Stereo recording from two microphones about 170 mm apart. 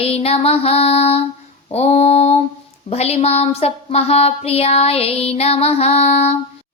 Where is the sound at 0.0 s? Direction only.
35° left (ahead or behind).